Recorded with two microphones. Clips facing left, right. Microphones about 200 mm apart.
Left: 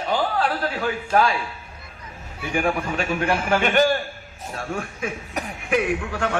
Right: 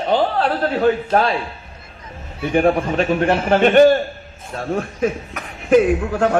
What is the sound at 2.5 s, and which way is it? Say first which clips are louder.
A man's voice: right 7 dB; 35° right (ahead or behind).